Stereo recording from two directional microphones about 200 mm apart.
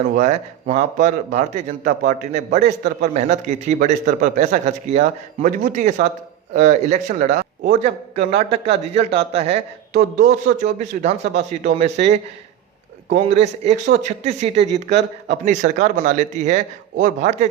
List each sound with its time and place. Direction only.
0.2 s a man's voice: 35° right (ahead or behind)
14.8 s a man's voice: 60° right (ahead or behind)
15.4 s a man's voice: 40° right (ahead or behind)